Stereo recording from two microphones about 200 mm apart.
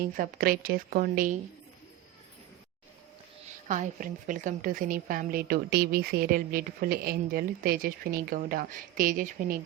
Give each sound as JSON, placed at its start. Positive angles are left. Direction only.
{"t": 0.2, "sound": "a woman's voice", "side_deg": -45}
{"t": 3.7, "sound": "a woman's voice", "side_deg": -40}